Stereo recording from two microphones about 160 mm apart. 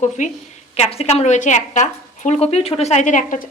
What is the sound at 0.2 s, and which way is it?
A woman's voice, 50° left (ahead or behind).